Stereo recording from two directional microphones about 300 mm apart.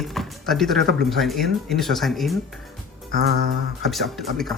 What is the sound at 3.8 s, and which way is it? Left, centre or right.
Speech, centre.